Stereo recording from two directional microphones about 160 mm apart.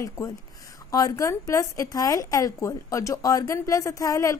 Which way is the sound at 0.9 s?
20° left (ahead or behind).